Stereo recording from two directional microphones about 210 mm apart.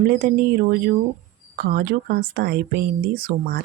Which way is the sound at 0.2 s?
45° right (ahead or behind).